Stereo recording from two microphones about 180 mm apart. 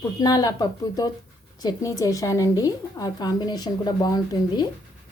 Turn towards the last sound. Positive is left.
turn(degrees=20)  # may be behind; listen again after turning